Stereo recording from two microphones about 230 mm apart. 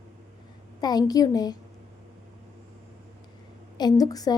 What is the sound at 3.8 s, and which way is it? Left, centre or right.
Speech, centre.